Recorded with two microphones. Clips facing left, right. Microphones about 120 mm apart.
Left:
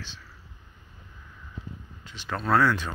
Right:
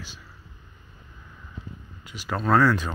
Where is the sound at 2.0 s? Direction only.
5° right (ahead or behind).